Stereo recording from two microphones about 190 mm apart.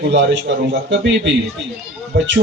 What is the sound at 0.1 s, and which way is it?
A man's voice, 70° right (ahead or behind).